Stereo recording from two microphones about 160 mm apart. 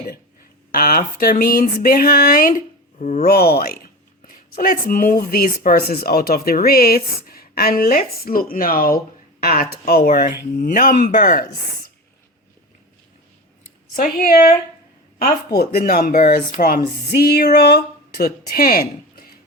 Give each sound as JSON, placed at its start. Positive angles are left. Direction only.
{"t": 0.7, "sound": "a sound", "side_deg": 65}
{"t": 3.0, "sound": "speech", "side_deg": 50}
{"t": 3.3, "sound": "speech", "side_deg": 75}
{"t": 10.6, "sound": "speech", "side_deg": 50}
{"t": 13.9, "sound": "a sound", "side_deg": 60}
{"t": 15.8, "sound": "speech", "side_deg": 65}